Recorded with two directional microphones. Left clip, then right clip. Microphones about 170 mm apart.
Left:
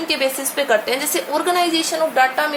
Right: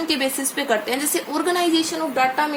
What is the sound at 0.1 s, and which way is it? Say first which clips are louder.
A woman's voice: left 6 dB; 25° right (ahead or behind).